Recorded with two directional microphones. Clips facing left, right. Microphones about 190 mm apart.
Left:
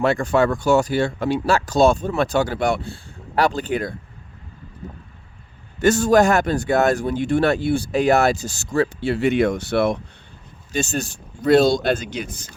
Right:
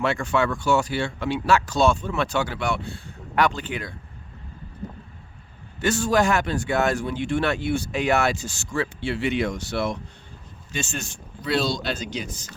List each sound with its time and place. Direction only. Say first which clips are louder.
0.0 s speech: left 5 dB; 40° left (ahead or behind)
5.8 s speech: left 6 dB; 45° left (ahead or behind)
10.7 s speech: left 7 dB; 40° left (ahead or behind); by 12.5 s 55° left (ahead or behind)